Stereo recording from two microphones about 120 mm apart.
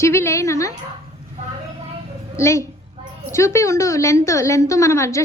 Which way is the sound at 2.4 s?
25° left (ahead or behind).